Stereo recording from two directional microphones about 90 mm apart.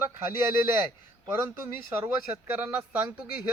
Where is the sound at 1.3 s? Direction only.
25° right (ahead or behind).